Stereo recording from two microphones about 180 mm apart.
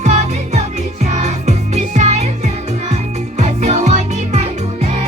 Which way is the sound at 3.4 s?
40° right (ahead or behind).